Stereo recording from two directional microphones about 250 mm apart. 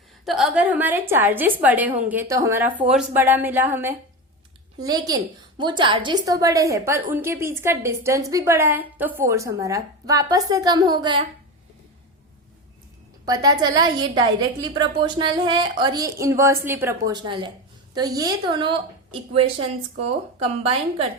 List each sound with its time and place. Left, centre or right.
0.3 s a woman's voice: centre
13.2 s a woman's voice: centre